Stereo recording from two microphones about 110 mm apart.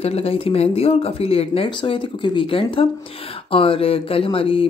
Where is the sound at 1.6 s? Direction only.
50° left (ahead or behind).